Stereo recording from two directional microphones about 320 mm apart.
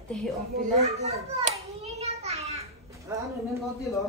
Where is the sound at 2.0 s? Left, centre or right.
Centre.